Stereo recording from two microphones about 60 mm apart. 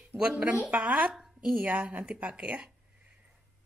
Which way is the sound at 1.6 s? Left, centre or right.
Right.